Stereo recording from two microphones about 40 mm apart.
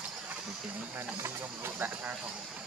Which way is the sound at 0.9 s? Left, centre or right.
Right.